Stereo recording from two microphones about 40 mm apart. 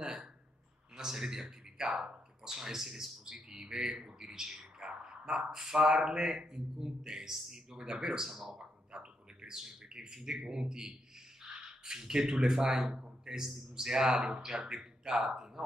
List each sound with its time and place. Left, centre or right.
0.9 s a man's voice: centre
7.7 s a man's voice: centre
8.3 s bird: centre
9.6 s a man's voice: centre